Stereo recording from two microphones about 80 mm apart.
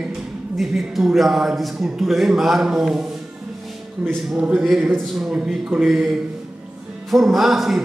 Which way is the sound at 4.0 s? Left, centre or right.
Right.